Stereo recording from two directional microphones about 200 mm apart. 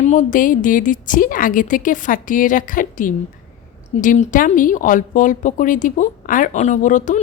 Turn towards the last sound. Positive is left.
turn(degrees=40)  # may be behind; listen again after turning